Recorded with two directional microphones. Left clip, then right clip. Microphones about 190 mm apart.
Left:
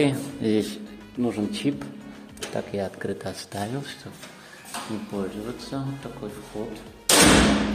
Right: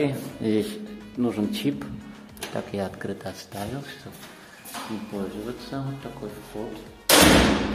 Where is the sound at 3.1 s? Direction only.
15° left (ahead or behind).